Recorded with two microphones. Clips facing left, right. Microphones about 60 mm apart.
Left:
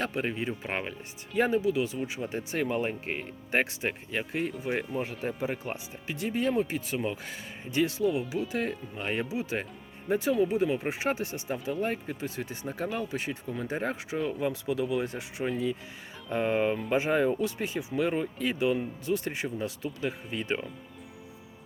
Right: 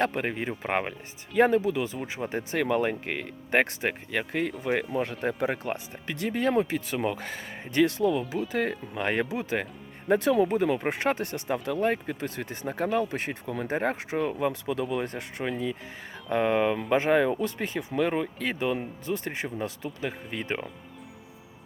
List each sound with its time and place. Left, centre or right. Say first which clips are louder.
0.0 s speech: right 3 dB; right
2.6 s speech: right 4 dB; right
7.3 s speech: right 3 dB; right
7.8 s speech: right 3 dB; right
9.0 s speech: right 4 dB; right
10.1 s speech: right 3 dB; right
14.3 s speech: right 2 dB; right
19.0 s speech: even; right